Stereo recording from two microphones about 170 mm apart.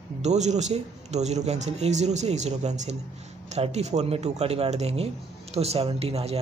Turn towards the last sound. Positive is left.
turn(degrees=-35)  # may be behind; listen again after turning